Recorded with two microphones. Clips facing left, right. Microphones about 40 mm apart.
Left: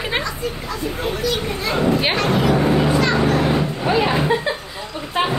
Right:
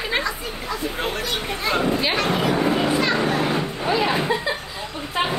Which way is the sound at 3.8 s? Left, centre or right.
Centre.